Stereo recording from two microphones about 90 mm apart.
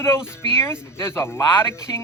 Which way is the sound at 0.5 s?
30° left (ahead or behind).